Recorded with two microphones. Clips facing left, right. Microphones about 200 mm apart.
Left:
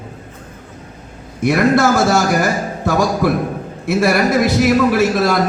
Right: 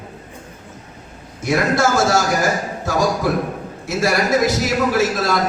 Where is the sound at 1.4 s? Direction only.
60° left (ahead or behind).